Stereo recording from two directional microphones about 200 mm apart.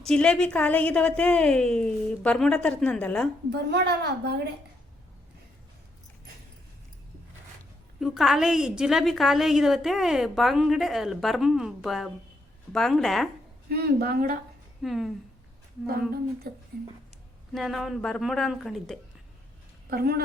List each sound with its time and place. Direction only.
0.0 s a woman's voice: 5° left (ahead or behind)
3.5 s a woman's voice: 55° right (ahead or behind)
7.9 s a woman's voice: centre (ahead or behind)
13.7 s a woman's voice: 55° right (ahead or behind)
14.8 s a woman's voice: centre (ahead or behind)
17.5 s a woman's voice: centre (ahead or behind)
19.9 s a woman's voice: 50° right (ahead or behind)